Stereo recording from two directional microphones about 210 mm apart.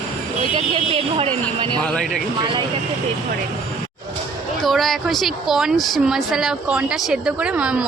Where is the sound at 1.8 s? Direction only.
5° left (ahead or behind).